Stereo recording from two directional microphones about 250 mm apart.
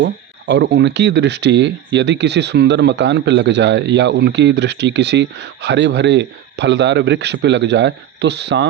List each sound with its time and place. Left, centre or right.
0.0 s speech: right